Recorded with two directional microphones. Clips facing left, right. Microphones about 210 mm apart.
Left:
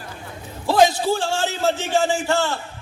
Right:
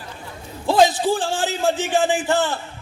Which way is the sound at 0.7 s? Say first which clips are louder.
Even; 20° right (ahead or behind).